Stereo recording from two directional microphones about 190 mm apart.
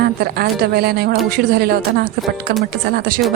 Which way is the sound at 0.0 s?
55° right (ahead or behind).